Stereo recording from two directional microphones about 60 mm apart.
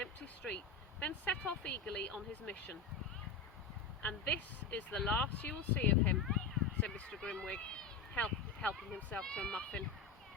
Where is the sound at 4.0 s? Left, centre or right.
Left.